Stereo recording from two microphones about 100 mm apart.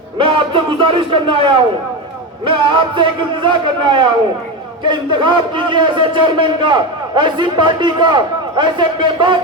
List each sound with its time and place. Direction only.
0.2 s a man's voice: 60° right (ahead or behind)